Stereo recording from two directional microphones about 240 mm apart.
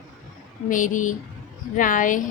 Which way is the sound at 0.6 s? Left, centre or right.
Left.